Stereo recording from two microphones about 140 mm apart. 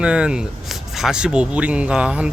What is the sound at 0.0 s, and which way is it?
Speech, 5° right (ahead or behind).